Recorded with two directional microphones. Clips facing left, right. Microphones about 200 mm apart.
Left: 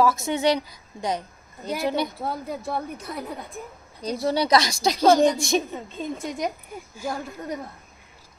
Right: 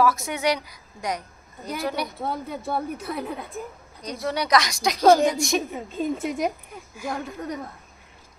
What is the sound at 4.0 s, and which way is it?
Speech, 30° left (ahead or behind).